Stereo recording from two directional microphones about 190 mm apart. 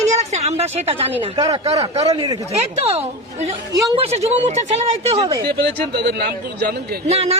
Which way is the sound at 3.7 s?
20° right (ahead or behind).